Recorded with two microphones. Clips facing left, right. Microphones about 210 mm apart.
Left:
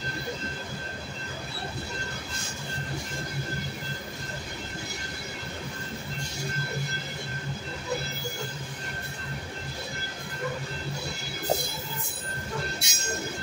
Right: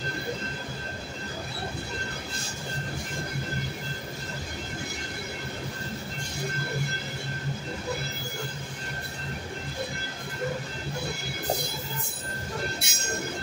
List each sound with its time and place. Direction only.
12.8 s train: 55° right (ahead or behind)